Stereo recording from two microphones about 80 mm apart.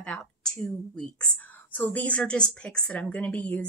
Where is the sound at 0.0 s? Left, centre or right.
Centre.